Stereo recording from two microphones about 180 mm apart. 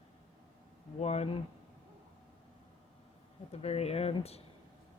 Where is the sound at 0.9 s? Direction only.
35° left (ahead or behind).